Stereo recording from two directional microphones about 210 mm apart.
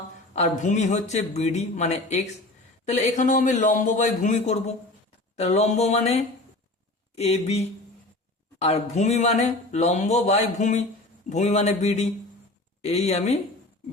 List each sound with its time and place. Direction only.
0.3 s speech: 35° left (ahead or behind)